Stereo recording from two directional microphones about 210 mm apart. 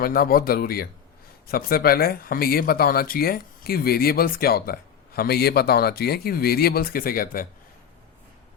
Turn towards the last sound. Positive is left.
turn(degrees=45)  # may be behind; listen again after turning